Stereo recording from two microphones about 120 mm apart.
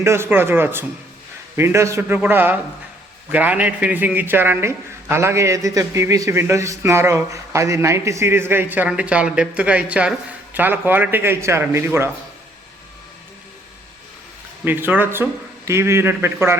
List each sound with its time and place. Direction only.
0.0 s a man's voice: 20° right (ahead or behind)
14.6 s a man's voice: 15° right (ahead or behind)